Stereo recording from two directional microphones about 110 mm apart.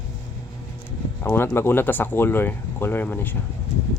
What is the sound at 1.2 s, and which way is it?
Speech, 20° left (ahead or behind).